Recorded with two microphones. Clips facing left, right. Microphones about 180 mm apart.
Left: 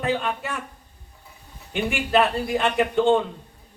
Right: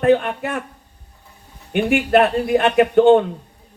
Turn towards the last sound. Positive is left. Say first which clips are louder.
# right 7 dB
turn(degrees=-60)  # may be behind; listen again after turning